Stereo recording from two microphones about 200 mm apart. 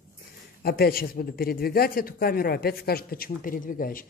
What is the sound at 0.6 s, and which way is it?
Speech, 50° left (ahead or behind).